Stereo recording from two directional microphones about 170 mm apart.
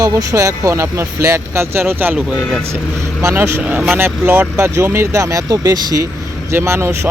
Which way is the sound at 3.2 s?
15° right (ahead or behind).